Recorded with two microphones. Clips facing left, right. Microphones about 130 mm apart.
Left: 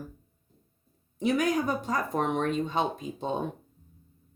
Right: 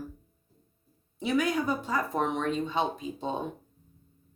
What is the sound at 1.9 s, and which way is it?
Speech, 50° left (ahead or behind).